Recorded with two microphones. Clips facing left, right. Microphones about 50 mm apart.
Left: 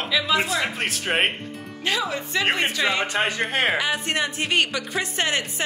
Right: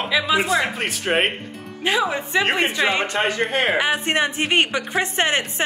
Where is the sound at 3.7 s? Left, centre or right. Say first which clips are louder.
Right 4 dB; right.